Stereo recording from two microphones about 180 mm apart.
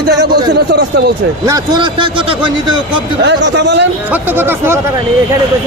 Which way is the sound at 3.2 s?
75° right (ahead or behind).